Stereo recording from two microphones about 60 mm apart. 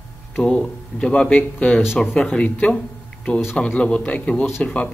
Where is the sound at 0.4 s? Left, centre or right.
Centre.